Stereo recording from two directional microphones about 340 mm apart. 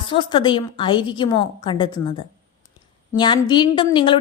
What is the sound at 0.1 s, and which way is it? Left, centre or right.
A woman's voice, centre.